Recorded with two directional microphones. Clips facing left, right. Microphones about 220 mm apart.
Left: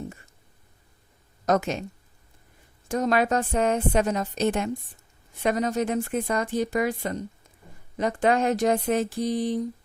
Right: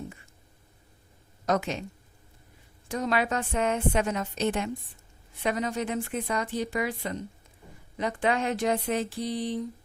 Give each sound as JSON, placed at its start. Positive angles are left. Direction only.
{"t": 1.5, "sound": "speech", "side_deg": 45}
{"t": 2.9, "sound": "a woman's voice", "side_deg": 45}